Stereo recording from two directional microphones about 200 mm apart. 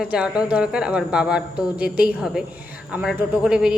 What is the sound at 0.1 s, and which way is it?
A woman's voice, 5° right (ahead or behind).